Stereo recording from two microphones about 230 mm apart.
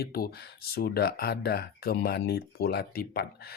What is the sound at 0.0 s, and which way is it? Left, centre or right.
Speech, left.